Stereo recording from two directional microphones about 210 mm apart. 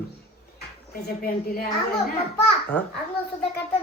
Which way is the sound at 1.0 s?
45° left (ahead or behind).